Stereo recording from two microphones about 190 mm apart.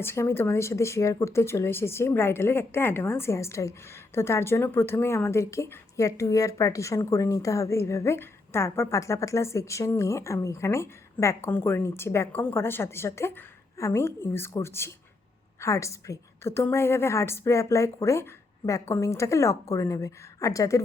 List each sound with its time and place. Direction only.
0.0 s speech: 10° left (ahead or behind)